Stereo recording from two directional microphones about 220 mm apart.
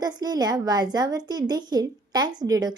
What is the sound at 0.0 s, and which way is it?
A woman's voice, 20° right (ahead or behind).